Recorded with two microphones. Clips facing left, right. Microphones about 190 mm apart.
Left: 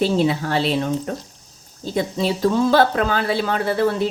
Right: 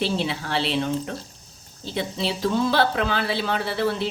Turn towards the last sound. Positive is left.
turn(degrees=45)  # may be behind; listen again after turning